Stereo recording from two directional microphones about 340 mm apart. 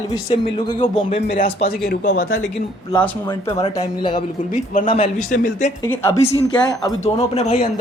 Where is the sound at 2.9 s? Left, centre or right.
Centre.